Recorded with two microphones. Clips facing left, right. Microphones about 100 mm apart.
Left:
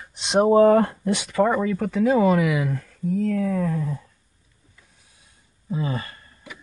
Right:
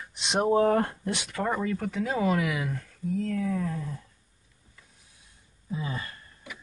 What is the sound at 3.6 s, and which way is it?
Speech, 90° left.